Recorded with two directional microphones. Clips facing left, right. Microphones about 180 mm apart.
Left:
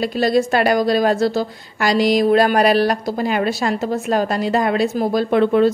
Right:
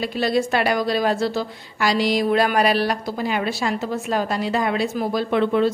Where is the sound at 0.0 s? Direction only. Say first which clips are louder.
Left 4 dB; 40° left (ahead or behind).